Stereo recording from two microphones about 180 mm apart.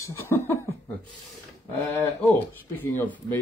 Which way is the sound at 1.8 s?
15° left (ahead or behind).